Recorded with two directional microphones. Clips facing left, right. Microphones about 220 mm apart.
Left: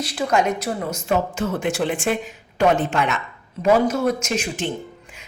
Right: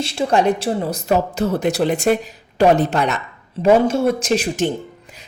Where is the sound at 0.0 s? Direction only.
25° right (ahead or behind).